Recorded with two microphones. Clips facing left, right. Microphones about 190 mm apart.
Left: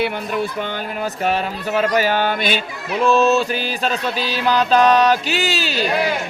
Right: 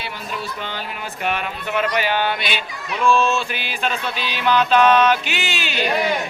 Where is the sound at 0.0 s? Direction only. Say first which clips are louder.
Left 9 dB; 55° left (ahead or behind).